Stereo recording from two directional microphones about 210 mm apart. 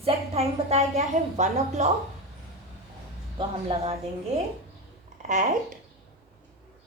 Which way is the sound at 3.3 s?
25° right (ahead or behind).